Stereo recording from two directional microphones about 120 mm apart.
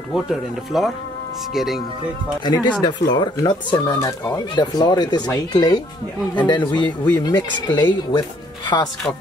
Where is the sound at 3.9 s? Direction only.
25° left (ahead or behind).